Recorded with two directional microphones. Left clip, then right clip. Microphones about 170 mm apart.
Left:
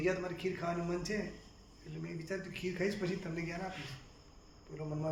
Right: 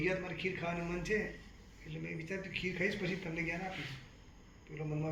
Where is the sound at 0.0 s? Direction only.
30° left (ahead or behind).